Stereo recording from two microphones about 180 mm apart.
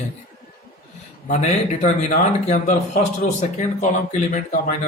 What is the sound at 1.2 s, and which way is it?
A man's voice, 40° left (ahead or behind).